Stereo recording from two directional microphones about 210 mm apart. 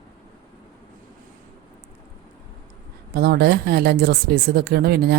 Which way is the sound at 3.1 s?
50° right (ahead or behind).